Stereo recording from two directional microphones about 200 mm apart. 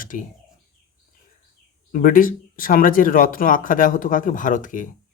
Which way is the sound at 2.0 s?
45° left (ahead or behind).